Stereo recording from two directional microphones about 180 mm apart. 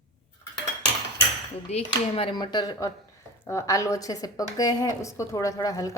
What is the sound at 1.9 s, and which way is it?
A woman's voice, 25° left (ahead or behind).